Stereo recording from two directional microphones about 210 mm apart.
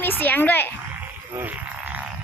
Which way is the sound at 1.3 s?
5° right (ahead or behind).